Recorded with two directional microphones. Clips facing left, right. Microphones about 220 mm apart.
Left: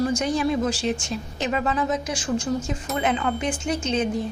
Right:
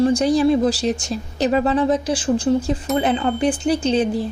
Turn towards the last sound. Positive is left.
turn(degrees=-35)  # may be behind; listen again after turning